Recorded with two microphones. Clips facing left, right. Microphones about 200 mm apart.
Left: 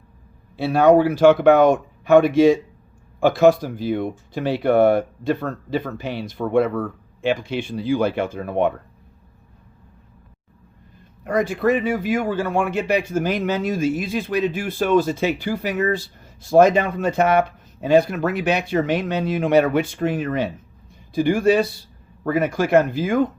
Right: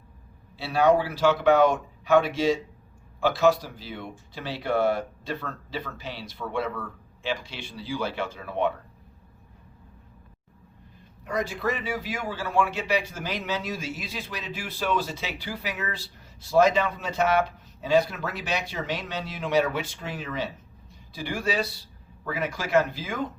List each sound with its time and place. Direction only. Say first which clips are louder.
0.5 s a man's voice: left 7 dB; 55° left (ahead or behind)
11.2 s a man's voice: left 9 dB; 55° left (ahead or behind)